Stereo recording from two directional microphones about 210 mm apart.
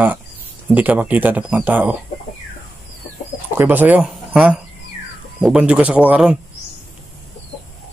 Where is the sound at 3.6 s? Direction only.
10° right (ahead or behind).